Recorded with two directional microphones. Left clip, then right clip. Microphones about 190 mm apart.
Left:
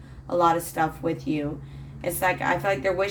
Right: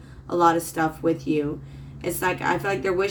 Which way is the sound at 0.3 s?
15° left (ahead or behind).